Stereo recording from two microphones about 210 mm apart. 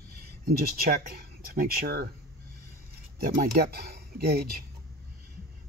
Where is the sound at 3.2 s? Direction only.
45° right (ahead or behind).